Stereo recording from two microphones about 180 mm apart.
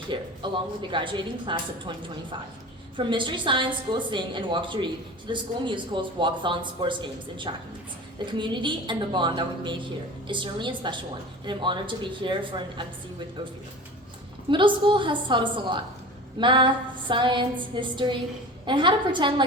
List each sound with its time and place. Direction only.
0.1 s speech: 25° right (ahead or behind)
3.0 s speech: 25° right (ahead or behind)
14.5 s speech: 25° right (ahead or behind)